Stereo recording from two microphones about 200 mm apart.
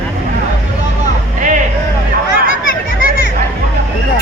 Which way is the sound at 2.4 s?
45° left (ahead or behind).